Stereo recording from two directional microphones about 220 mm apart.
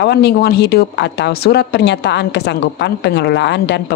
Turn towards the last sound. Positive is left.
turn(degrees=50)  # may be behind; listen again after turning